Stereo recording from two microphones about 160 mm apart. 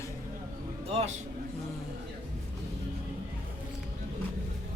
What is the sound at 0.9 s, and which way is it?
Speech, 40° right (ahead or behind).